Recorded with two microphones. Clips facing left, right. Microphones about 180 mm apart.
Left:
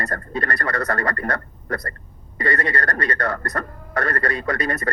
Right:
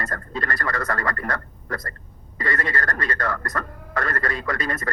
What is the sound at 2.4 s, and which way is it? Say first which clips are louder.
Speech: left 3 dB; 65° left (ahead or behind).